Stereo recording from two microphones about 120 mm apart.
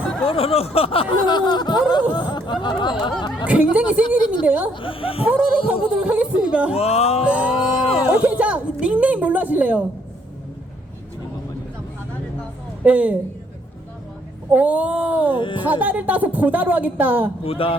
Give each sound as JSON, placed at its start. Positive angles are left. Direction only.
{"t": 0.3, "sound": "speech", "side_deg": 55}
{"t": 1.2, "sound": "speech", "side_deg": 40}
{"t": 3.4, "sound": "a woman's voice", "side_deg": -10}
{"t": 4.7, "sound": "speech", "side_deg": 45}
{"t": 5.2, "sound": "a woman's voice", "side_deg": -10}
{"t": 6.7, "sound": "music", "side_deg": 60}
{"t": 7.3, "sound": "a woman's voice", "side_deg": -10}
{"t": 12.8, "sound": "a woman's voice", "side_deg": -10}
{"t": 14.5, "sound": "a woman's voice", "side_deg": -10}
{"t": 15.4, "sound": "speech", "side_deg": 40}
{"t": 15.7, "sound": "a woman's voice", "side_deg": -10}
{"t": 17.4, "sound": "speech", "side_deg": 50}